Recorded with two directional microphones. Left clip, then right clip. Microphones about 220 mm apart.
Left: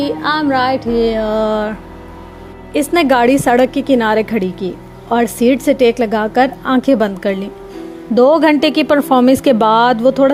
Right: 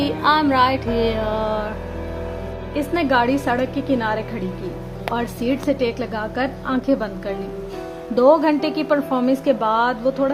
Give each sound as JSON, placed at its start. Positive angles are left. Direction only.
{"t": 0.0, "sound": "music", "side_deg": 15}
{"t": 2.7, "sound": "a woman's voice", "side_deg": 35}